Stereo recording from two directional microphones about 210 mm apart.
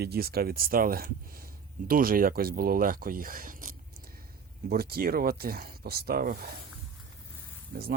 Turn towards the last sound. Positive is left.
turn(degrees=-50)  # may be behind; listen again after turning